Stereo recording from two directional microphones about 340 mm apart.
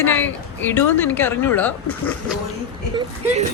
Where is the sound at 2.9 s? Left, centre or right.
Centre.